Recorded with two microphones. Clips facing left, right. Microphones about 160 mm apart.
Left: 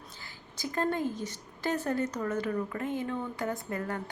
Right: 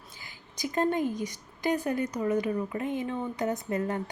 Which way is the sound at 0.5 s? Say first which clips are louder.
Right 3 dB; 20° right (ahead or behind).